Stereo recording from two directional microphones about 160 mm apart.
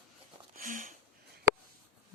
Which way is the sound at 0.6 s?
55° right (ahead or behind).